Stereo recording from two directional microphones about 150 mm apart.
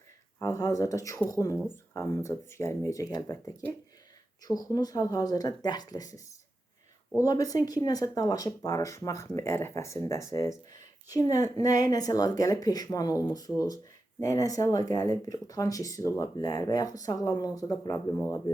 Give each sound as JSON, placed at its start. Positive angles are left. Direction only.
{"t": 0.3, "sound": "speech", "side_deg": 20}